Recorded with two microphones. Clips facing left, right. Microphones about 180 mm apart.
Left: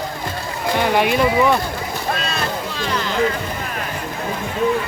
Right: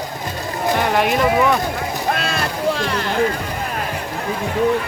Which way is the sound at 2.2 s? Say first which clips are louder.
Right 3 dB; 60° right (ahead or behind).